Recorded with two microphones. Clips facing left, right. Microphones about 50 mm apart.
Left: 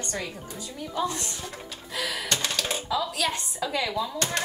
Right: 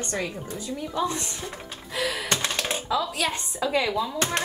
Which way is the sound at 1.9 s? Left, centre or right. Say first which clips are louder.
Right 3 dB; right.